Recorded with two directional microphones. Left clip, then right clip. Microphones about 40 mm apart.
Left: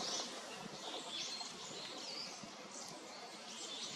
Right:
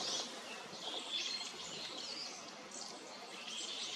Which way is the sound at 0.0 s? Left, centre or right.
Right.